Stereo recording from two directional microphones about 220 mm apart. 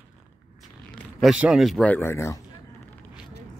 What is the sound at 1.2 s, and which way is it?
Speech, 5° right (ahead or behind).